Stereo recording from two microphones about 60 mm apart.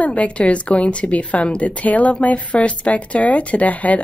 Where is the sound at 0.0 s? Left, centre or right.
Left.